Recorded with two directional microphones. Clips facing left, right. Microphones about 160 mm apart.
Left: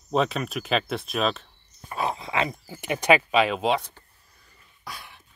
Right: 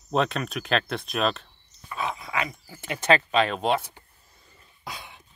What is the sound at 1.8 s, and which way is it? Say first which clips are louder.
Dog: left 3 dB; 40° left (ahead or behind).